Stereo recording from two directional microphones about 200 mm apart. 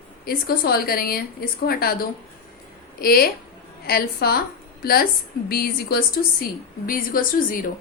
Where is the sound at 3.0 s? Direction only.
50° left (ahead or behind).